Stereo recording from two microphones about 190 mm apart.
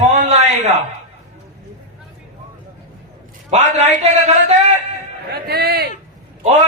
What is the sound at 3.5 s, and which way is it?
A man's voice, 35° right (ahead or behind).